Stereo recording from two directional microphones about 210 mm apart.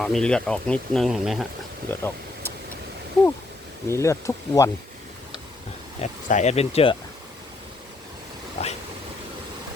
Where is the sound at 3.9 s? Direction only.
15° left (ahead or behind).